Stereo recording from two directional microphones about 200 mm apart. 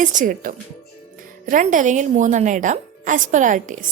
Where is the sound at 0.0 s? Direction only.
40° right (ahead or behind).